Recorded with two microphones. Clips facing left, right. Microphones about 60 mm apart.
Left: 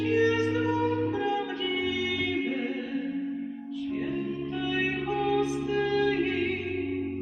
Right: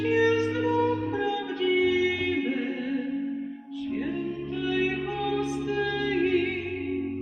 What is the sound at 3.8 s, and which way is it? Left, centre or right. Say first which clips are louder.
Music: right 2 dB; right.